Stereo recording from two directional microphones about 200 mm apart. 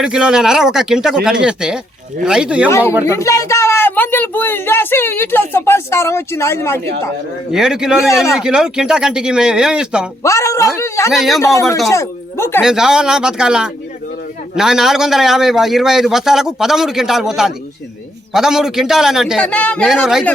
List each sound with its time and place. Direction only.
0.0 s a man's voice: 5° right (ahead or behind)
2.6 s speech: 15° left (ahead or behind)
7.5 s a man's voice: 5° right (ahead or behind)
10.2 s speech: 15° left (ahead or behind)
11.1 s a man's voice: centre (ahead or behind)
11.3 s speech: 15° left (ahead or behind)
12.6 s a man's voice: centre (ahead or behind)